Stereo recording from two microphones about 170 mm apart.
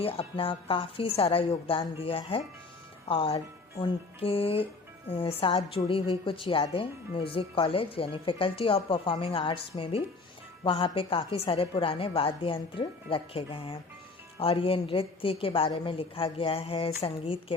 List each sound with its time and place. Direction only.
0.0 s a woman's voice: 35° left (ahead or behind)